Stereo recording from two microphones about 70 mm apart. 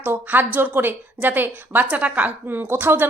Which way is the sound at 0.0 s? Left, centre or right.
Right.